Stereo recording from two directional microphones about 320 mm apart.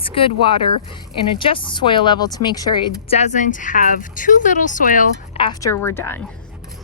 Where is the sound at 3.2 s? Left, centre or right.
Left.